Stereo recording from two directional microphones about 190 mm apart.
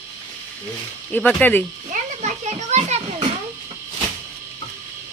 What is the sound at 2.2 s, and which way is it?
Children playing, 35° right (ahead or behind).